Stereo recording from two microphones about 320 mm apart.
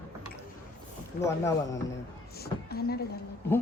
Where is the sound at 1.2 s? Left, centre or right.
Centre.